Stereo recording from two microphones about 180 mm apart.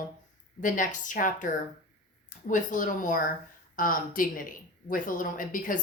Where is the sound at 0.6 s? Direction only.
45° left (ahead or behind).